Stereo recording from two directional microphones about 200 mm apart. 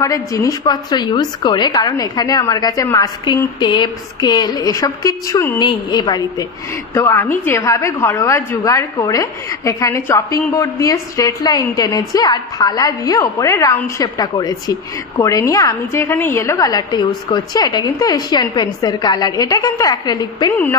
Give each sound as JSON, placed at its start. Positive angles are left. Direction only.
{"t": 0.0, "sound": "a woman's voice", "side_deg": 15}